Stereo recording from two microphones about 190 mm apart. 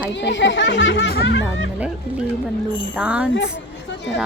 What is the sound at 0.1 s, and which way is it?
Speech, 70° left (ahead or behind).